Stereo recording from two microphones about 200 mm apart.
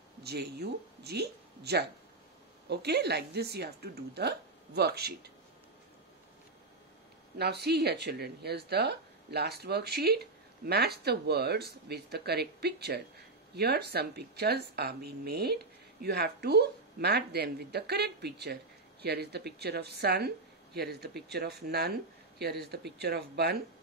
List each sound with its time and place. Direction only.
0.2 s speech: 55° right (ahead or behind)
7.3 s speech: 55° right (ahead or behind)